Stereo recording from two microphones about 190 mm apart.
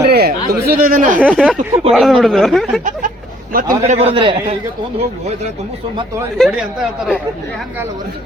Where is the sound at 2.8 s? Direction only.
45° right (ahead or behind).